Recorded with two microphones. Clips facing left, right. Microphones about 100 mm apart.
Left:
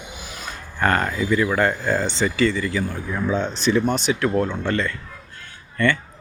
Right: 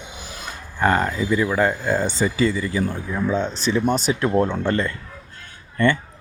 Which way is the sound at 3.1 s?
Centre (ahead or behind).